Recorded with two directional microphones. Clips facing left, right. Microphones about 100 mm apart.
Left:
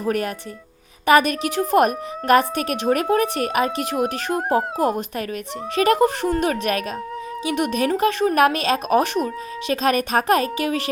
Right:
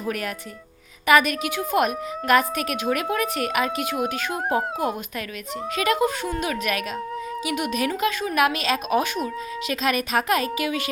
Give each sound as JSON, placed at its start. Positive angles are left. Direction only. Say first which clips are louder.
{"t": 0.0, "sound": "a woman's voice", "louder": "left 5 dB", "side_deg": 35}